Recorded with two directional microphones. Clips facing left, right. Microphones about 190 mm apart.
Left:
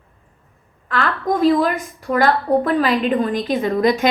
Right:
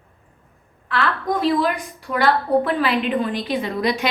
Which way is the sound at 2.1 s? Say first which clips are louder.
Left 2 dB; 45° left (ahead or behind).